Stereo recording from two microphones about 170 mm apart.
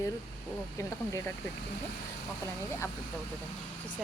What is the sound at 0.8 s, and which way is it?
Speech, 15° left (ahead or behind).